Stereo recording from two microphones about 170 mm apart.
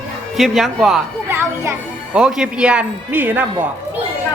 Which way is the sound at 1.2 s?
15° right (ahead or behind).